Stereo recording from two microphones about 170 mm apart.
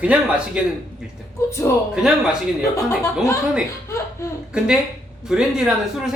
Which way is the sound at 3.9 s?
15° left (ahead or behind).